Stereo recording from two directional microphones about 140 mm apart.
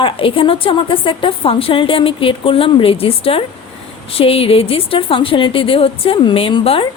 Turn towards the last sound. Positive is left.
turn(degrees=40)  # may be behind; listen again after turning